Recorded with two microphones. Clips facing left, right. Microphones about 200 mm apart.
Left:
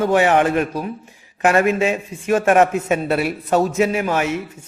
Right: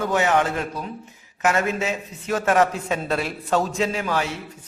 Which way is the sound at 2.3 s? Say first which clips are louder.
Left 5 dB; 25° left (ahead or behind).